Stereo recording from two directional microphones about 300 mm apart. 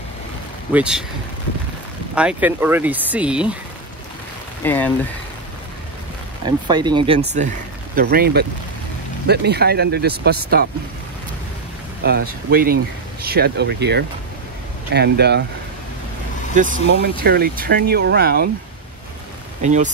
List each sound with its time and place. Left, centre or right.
0.7 s speech: centre
2.1 s speech: centre
4.6 s speech: centre
6.4 s speech: centre; by 10.7 s right
12.0 s speech: right
16.5 s speech: right
19.6 s speech: right